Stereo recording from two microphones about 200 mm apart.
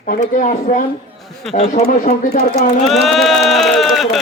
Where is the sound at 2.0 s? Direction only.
45° left (ahead or behind).